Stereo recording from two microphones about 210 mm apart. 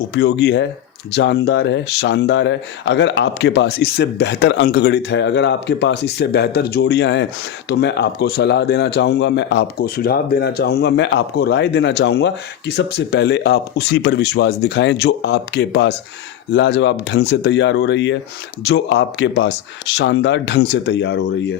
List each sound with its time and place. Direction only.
0.1 s speech: 55° left (ahead or behind)